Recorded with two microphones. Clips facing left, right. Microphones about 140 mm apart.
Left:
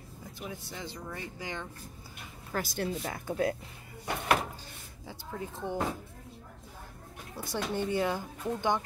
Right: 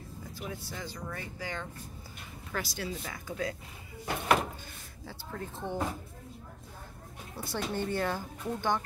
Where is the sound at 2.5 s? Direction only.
50° left (ahead or behind).